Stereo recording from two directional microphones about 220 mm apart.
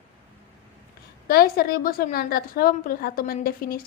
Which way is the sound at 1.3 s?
45° left (ahead or behind).